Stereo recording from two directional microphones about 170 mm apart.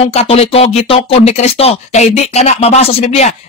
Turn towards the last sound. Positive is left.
turn(degrees=40)  # may be behind; listen again after turning